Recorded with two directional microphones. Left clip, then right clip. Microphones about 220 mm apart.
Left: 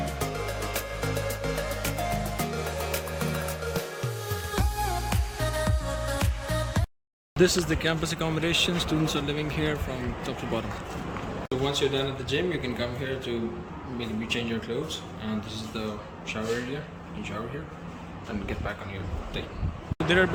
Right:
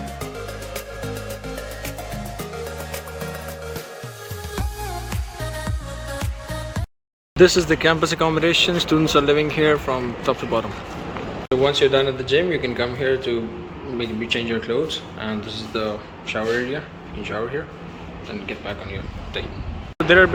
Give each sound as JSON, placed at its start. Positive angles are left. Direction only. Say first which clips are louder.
{"t": 5.4, "sound": "music", "louder": "left 1 dB", "side_deg": 0}
{"t": 7.3, "sound": "a man's voice", "louder": "right 9 dB", "side_deg": 5}
{"t": 20.1, "sound": "a man's voice", "louder": "right 10 dB", "side_deg": 10}